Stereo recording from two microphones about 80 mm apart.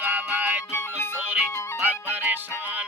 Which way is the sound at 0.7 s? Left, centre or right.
Left.